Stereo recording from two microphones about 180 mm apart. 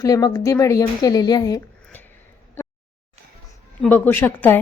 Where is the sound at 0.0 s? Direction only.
20° left (ahead or behind).